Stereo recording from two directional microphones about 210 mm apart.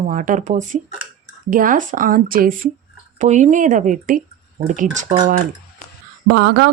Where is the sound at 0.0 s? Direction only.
40° right (ahead or behind).